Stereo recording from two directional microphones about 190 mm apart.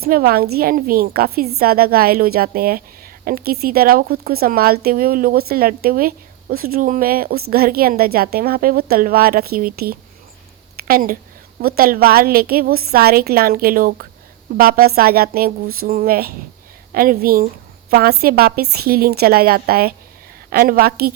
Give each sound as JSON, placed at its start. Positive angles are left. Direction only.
{"t": 0.0, "sound": "a woman's voice", "side_deg": -50}
{"t": 10.8, "sound": "a sound", "side_deg": -50}
{"t": 11.6, "sound": "a woman's voice", "side_deg": -50}